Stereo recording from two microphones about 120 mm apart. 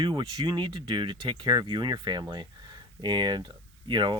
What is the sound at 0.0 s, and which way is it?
Speech, 40° right (ahead or behind).